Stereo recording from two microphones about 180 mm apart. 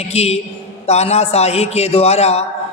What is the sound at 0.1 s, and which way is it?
A man's voice, 35° left (ahead or behind).